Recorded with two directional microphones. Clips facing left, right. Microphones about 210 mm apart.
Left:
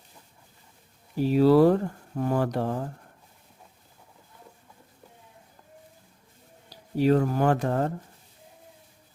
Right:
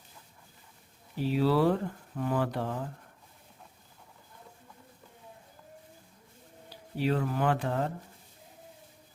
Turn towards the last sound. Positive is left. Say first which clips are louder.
# left 5 dB
turn(degrees=45)  # may be behind; listen again after turning